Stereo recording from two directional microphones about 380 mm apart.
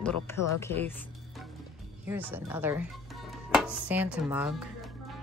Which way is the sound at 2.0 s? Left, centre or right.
Centre.